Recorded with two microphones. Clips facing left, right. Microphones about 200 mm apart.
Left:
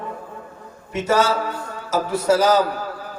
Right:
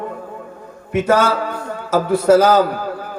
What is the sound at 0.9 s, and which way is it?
A man's voice, 55° right (ahead or behind).